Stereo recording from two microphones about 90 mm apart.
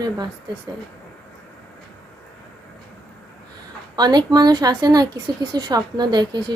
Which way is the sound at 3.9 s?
50° right (ahead or behind).